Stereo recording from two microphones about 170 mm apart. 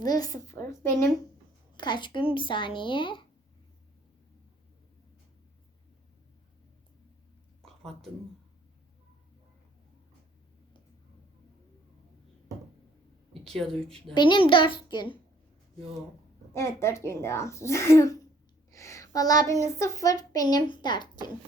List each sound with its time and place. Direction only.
0.0 s speech: 20° left (ahead or behind)
7.6 s a sound: centre (ahead or behind)
13.4 s a woman's voice: 5° left (ahead or behind)
14.1 s speech: 25° left (ahead or behind)
16.5 s speech: 15° left (ahead or behind)
18.7 s child singing: 15° left (ahead or behind)
19.8 s speech: 20° left (ahead or behind)